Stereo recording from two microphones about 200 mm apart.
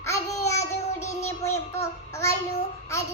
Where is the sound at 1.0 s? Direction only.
15° left (ahead or behind).